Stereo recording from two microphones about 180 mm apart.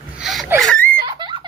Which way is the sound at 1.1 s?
25° right (ahead or behind).